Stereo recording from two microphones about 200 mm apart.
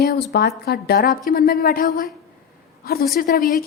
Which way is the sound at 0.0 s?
55° left (ahead or behind).